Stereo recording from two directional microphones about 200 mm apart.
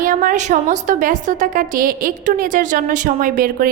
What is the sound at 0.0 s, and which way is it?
A woman's voice, 40° right (ahead or behind).